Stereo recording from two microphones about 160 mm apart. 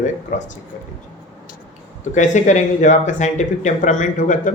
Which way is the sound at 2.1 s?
50° left (ahead or behind).